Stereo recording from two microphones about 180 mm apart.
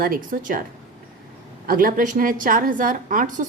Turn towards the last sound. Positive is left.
turn(degrees=-50)  # may be behind; listen again after turning